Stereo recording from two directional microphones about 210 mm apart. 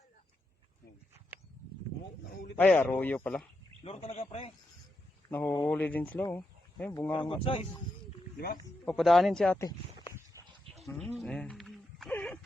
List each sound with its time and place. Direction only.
2.6 s speech: 5° left (ahead or behind)
3.8 s speech: 30° left (ahead or behind)
5.3 s speech: 10° left (ahead or behind)
7.1 s speech: 25° left (ahead or behind)
8.8 s speech: centre (ahead or behind)
9.6 s speech: 20° left (ahead or behind)
10.3 s a sound: 15° right (ahead or behind)
10.8 s a sound: centre (ahead or behind)